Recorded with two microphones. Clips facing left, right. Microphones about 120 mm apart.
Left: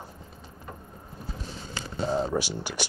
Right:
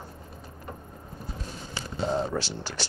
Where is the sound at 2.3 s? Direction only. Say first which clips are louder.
Left 3 dB; 15° left (ahead or behind).